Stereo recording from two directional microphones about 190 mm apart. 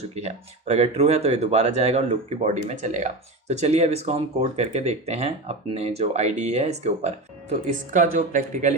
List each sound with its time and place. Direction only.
0.1 s speech: 35° right (ahead or behind)